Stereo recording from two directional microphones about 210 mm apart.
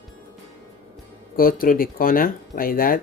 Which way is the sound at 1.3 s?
45° left (ahead or behind).